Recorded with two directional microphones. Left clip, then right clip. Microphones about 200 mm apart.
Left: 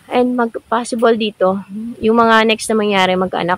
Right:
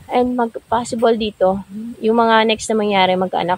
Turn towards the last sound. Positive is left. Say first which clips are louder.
# left 1 dB
turn(degrees=20)  # may be behind; listen again after turning